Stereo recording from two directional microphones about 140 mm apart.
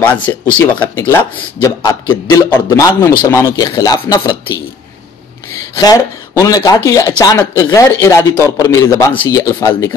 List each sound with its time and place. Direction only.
0.0 s speech: 10° left (ahead or behind)
2.0 s a man's voice: 30° left (ahead or behind)
5.5 s a sound: 25° left (ahead or behind)
6.4 s a man's voice: 25° left (ahead or behind)